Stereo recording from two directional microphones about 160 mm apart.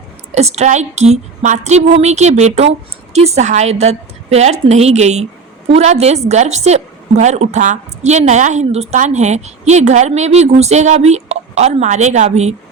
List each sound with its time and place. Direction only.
0.3 s a woman's voice: 45° right (ahead or behind)